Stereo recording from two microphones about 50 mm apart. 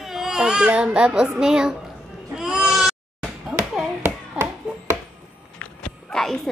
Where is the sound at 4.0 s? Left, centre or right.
Right.